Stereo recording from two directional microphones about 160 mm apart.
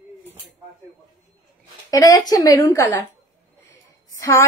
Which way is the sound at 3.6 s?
15° left (ahead or behind).